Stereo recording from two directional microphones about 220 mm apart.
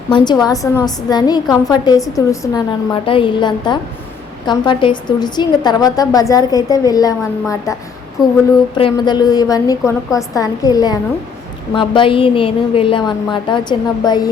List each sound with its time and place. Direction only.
0.1 s a woman's voice: 20° left (ahead or behind)